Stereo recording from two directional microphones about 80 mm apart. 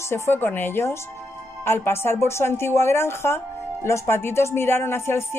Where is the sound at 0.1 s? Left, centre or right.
Left.